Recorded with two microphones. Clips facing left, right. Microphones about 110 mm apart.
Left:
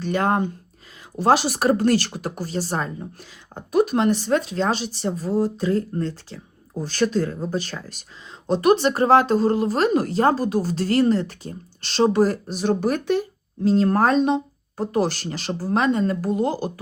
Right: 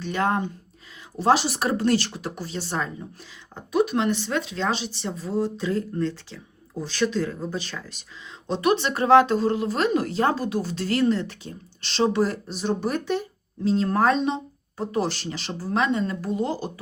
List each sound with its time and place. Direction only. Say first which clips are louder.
0.0 s a woman's voice: left 3 dB; 50° left (ahead or behind)
12.5 s a woman's voice: left 3 dB; 70° left (ahead or behind)